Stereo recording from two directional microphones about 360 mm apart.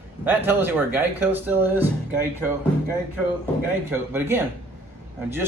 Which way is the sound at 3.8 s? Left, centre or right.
Centre.